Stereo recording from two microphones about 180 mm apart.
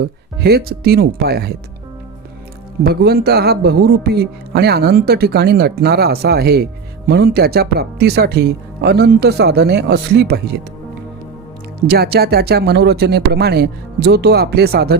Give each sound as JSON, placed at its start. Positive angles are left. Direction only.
{"t": 0.0, "sound": "speech", "side_deg": -60}
{"t": 2.8, "sound": "speech", "side_deg": -60}
{"t": 11.9, "sound": "speech", "side_deg": -60}